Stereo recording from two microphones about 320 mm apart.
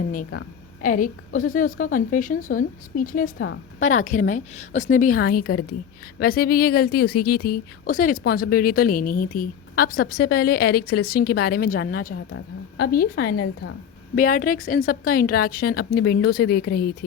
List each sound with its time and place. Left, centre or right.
0.8 s a woman's voice: left